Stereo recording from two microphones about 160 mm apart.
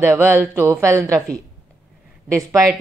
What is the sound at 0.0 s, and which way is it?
Speech, 15° right (ahead or behind).